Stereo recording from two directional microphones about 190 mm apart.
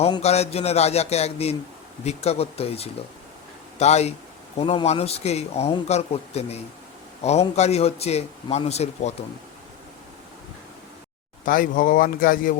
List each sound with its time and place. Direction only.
0.0 s a man's voice: 35° left (ahead or behind)
11.4 s speech: 45° left (ahead or behind)